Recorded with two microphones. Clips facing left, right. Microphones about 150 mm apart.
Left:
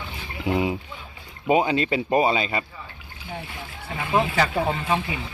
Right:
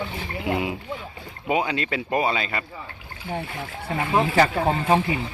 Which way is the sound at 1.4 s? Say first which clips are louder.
Left 4 dB; 25° left (ahead or behind).